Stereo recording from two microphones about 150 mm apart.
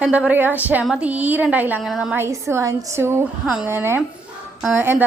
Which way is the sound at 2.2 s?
20° right (ahead or behind).